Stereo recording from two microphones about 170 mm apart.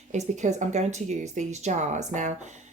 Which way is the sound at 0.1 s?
45° right (ahead or behind).